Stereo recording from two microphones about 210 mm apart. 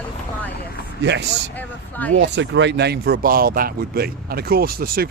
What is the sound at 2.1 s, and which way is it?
Speech, 60° right (ahead or behind).